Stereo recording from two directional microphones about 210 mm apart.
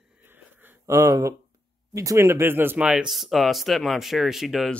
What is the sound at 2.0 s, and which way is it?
Speech, 15° right (ahead or behind).